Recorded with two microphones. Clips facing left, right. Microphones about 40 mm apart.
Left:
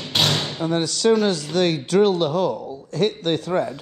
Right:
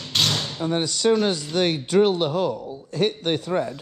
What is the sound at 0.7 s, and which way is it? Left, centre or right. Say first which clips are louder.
Speech: left 2 dB; left.